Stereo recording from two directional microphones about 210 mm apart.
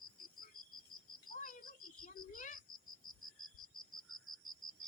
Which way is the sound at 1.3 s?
40° left (ahead or behind).